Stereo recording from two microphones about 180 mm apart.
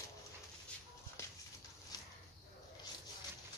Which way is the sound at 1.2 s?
15° left (ahead or behind).